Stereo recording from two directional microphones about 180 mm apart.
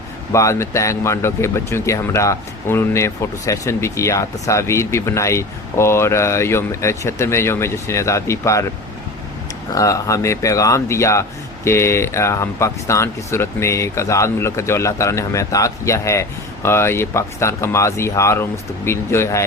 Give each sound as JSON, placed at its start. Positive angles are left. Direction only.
{"t": 0.3, "sound": "speech", "side_deg": 15}
{"t": 9.7, "sound": "speech", "side_deg": 20}